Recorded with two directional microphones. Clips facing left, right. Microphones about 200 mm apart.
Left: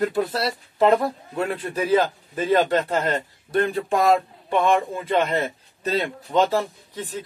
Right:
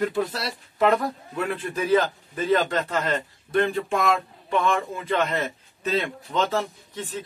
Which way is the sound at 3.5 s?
35° left (ahead or behind).